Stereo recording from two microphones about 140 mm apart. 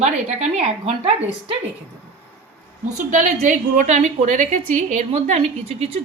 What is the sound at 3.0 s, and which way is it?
A woman's voice, 60° right (ahead or behind).